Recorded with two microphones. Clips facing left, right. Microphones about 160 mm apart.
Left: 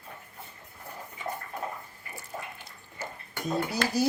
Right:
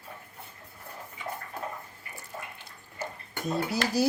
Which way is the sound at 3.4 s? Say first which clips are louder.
Even; centre (ahead or behind).